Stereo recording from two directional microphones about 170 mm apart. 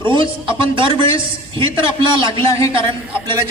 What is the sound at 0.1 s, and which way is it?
A woman's voice, 30° right (ahead or behind).